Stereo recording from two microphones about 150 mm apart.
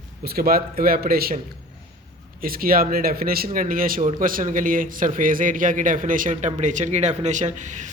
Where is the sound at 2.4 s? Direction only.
75° right (ahead or behind).